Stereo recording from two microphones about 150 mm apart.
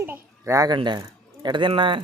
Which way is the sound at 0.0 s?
15° right (ahead or behind).